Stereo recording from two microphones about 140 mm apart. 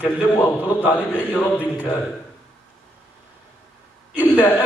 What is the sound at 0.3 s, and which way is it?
A man's voice, 15° left (ahead or behind).